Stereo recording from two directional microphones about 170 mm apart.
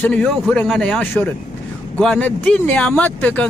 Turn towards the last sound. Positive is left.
turn(degrees=10)  # may be behind; listen again after turning